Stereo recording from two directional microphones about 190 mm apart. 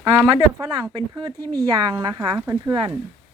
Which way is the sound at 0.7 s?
20° right (ahead or behind).